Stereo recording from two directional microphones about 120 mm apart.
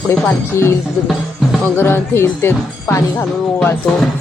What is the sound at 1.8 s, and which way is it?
Speech, 20° left (ahead or behind).